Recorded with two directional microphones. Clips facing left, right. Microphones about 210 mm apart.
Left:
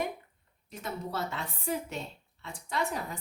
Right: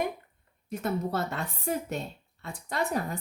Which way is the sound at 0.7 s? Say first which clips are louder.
Right 7 dB; 55° right (ahead or behind).